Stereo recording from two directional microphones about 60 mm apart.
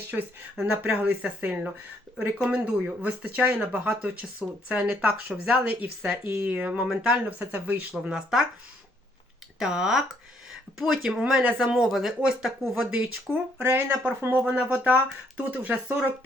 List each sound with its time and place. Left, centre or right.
0.1 s speech: centre
6.2 s speech: right
6.5 s speech: right
8.1 s speech: centre
9.6 s speech: centre
11.1 s speech: centre
11.9 s speech: centre
13.6 s speech: right
14.4 s speech: right